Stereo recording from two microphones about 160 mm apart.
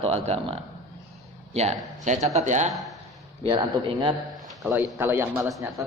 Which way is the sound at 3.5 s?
30° right (ahead or behind).